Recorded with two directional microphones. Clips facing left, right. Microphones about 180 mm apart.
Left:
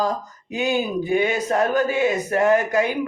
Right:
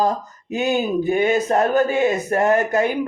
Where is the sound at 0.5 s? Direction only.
45° right (ahead or behind).